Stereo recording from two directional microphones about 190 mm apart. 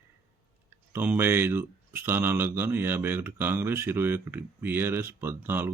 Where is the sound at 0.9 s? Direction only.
10° right (ahead or behind).